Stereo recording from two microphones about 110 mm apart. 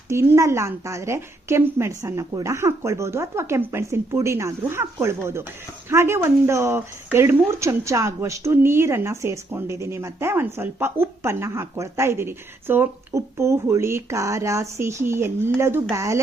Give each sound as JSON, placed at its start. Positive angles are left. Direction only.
{"t": 0.1, "sound": "speech", "side_deg": -25}